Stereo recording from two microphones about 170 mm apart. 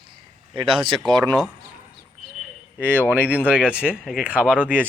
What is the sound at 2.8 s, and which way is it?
Speech, 10° left (ahead or behind).